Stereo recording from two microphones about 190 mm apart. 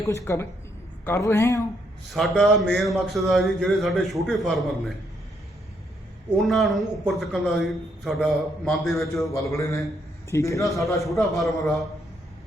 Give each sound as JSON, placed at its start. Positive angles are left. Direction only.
{"t": 0.0, "sound": "speech", "side_deg": 15}
{"t": 2.0, "sound": "a man's voice", "side_deg": 0}
{"t": 6.5, "sound": "a man's voice", "side_deg": 0}
{"t": 9.2, "sound": "speech", "side_deg": 15}
{"t": 11.0, "sound": "a man's voice", "side_deg": 0}